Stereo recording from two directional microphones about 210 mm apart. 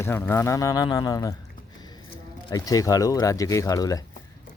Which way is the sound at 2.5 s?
15° left (ahead or behind).